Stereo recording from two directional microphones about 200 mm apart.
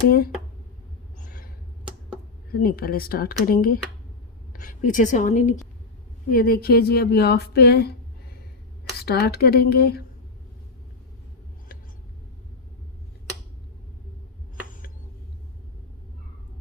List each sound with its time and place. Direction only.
1.2 s a sound: 45° left (ahead or behind)
2.5 s a woman's voice: 45° left (ahead or behind)
6.3 s speech: 50° left (ahead or behind)
9.0 s speech: 50° left (ahead or behind)